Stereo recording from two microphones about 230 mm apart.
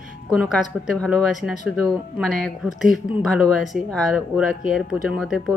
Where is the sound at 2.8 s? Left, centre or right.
Centre.